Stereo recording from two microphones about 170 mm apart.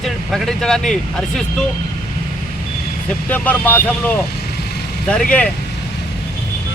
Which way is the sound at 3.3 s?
10° left (ahead or behind).